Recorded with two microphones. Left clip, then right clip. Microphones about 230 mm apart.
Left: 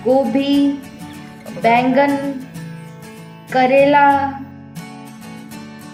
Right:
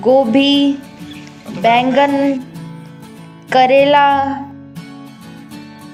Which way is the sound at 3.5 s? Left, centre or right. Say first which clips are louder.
Right 3 dB; right.